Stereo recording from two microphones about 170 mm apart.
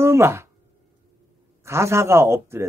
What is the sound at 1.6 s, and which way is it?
A man's voice, 15° right (ahead or behind).